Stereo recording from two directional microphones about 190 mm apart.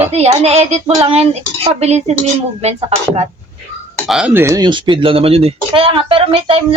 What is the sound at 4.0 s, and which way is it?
Speech, centre (ahead or behind).